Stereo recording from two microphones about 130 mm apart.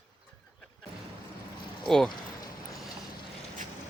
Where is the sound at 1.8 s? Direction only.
5° left (ahead or behind).